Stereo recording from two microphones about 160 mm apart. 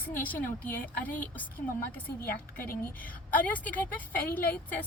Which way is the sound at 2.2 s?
65° left (ahead or behind).